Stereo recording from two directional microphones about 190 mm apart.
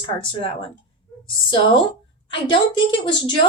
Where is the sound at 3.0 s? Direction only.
25° left (ahead or behind).